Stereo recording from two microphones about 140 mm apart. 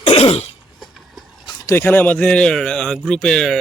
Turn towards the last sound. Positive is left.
turn(degrees=5)  # may be behind; listen again after turning